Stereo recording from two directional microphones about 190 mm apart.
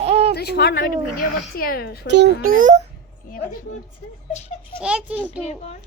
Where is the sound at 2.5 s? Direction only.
40° right (ahead or behind).